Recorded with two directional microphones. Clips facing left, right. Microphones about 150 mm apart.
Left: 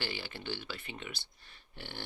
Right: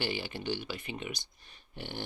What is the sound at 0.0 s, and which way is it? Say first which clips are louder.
Speech: right 5 dB; 15° right (ahead or behind).